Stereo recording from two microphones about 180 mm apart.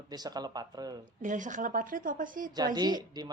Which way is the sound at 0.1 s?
20° right (ahead or behind).